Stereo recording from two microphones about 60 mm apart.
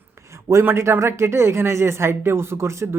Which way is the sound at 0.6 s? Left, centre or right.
Right.